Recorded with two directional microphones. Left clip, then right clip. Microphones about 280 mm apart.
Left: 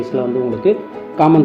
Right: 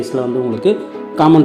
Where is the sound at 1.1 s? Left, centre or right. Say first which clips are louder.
Right 1 dB; centre.